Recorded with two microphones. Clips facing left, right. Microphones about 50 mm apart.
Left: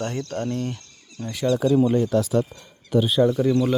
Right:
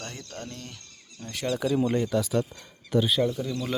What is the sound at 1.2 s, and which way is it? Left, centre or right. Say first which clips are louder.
Speech: left 9 dB; left.